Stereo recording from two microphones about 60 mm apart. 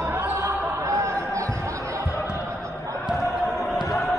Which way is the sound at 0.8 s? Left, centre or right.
Right.